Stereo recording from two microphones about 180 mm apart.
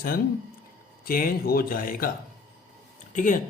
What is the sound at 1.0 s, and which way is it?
Speech, 55° left (ahead or behind).